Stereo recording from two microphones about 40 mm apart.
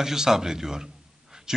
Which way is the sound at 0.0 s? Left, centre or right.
Centre.